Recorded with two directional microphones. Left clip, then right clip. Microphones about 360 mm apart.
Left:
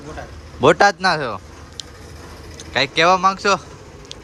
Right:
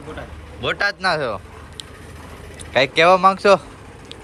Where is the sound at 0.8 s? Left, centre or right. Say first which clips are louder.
Left 4 dB; centre.